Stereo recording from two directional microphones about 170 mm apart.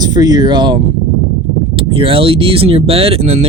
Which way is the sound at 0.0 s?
25° right (ahead or behind).